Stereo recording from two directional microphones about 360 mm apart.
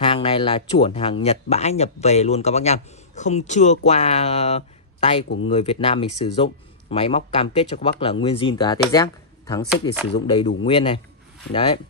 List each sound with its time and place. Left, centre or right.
0.0 s speech: centre